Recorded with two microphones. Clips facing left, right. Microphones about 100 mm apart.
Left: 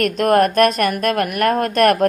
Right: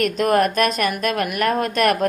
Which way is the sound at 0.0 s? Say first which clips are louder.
Left 3 dB; 50° left (ahead or behind).